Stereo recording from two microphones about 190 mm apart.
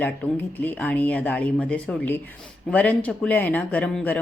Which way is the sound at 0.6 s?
10° left (ahead or behind).